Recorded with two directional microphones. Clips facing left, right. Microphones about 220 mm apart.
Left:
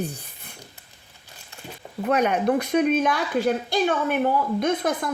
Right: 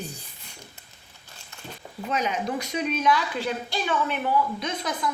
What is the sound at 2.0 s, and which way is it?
A woman's voice, 60° left (ahead or behind).